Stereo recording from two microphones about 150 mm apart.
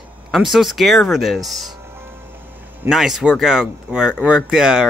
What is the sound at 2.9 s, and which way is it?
Speech, 5° right (ahead or behind).